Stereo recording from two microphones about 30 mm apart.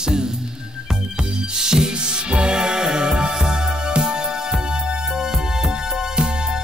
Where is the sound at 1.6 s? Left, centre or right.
Right.